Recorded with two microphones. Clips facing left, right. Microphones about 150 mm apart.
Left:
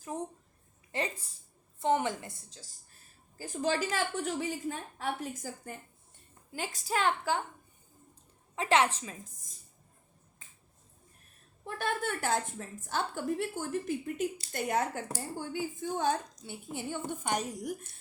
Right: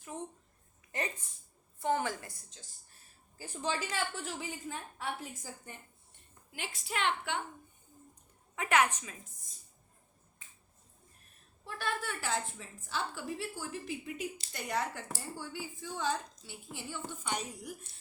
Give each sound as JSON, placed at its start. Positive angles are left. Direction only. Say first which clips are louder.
{"t": 0.9, "sound": "a sound", "louder": "left 3 dB", "side_deg": 30}
{"t": 1.8, "sound": "a woman's voice", "louder": "left 3 dB", "side_deg": 20}
{"t": 3.3, "sound": "a woman's voice", "louder": "left 5 dB", "side_deg": 40}
{"t": 8.5, "sound": "a woman's voice", "louder": "left 2 dB", "side_deg": 30}
{"t": 11.6, "sound": "a woman's voice", "louder": "left 4 dB", "side_deg": 50}